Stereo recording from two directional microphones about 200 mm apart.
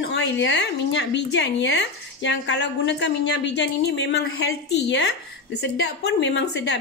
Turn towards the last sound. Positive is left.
turn(degrees=60)  # may be behind; listen again after turning